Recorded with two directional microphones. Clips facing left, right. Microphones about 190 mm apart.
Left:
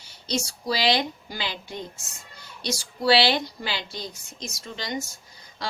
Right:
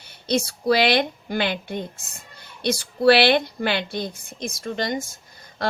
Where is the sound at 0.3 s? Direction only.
55° right (ahead or behind).